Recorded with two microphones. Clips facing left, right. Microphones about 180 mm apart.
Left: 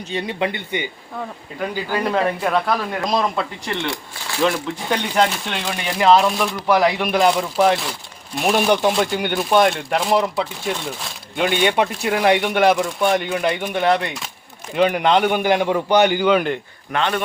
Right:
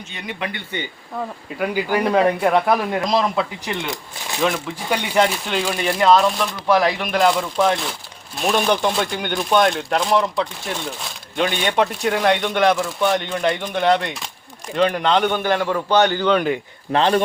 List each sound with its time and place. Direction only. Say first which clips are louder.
0.1 s speech: left 7 dB; 30° left (ahead or behind)
1.5 s speech: right 3 dB; 10° right (ahead or behind)
3.1 s speech: left 1 dB; centre (ahead or behind)
3.8 s speech: left 1 dB; 20° right (ahead or behind)
4.9 s a man's voice: right 1 dB; centre (ahead or behind)
16.9 s speech: right 4 dB; 30° right (ahead or behind)